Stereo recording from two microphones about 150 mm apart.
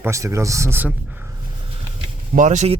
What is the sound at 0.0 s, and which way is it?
Speech, 20° right (ahead or behind).